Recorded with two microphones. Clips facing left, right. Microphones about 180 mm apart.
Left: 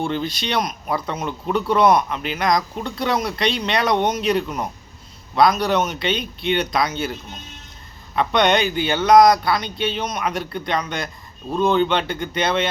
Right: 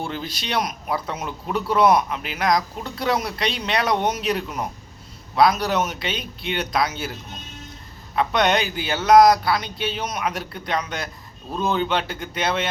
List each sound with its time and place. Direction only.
0.0 s speech: 5° right (ahead or behind)
8.1 s speech: 5° right (ahead or behind)